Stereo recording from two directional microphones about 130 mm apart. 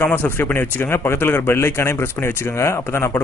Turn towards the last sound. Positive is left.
turn(degrees=20)  # may be behind; listen again after turning